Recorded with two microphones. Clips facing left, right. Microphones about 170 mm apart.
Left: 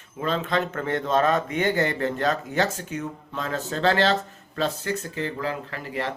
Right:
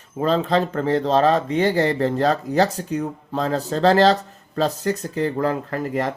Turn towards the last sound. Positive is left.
turn(degrees=-40)  # may be behind; listen again after turning